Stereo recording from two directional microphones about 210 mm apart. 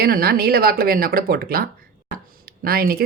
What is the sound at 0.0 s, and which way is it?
Speech, 45° right (ahead or behind).